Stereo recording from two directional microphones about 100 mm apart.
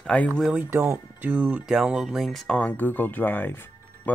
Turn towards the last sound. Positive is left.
turn(degrees=20)  # may be behind; listen again after turning